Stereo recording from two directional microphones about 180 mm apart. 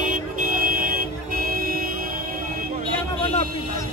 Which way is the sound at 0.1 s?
50° right (ahead or behind).